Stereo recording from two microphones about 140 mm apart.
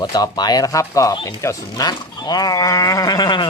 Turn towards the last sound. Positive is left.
turn(degrees=30)  # may be behind; listen again after turning